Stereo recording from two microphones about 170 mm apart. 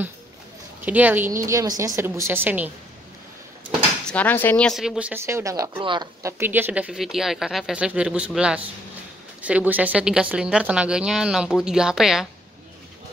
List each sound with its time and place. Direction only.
0.8 s a woman's voice: 10° right (ahead or behind)
4.0 s a woman's voice: 10° left (ahead or behind); by 5.8 s 20° right (ahead or behind)
5.8 s a woman's voice: 30° right (ahead or behind)
6.2 s a woman's voice: 10° right (ahead or behind)